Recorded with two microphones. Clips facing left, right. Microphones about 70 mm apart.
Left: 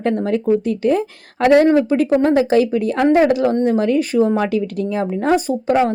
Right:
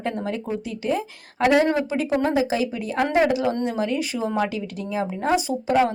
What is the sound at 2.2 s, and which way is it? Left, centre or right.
A woman's voice, left.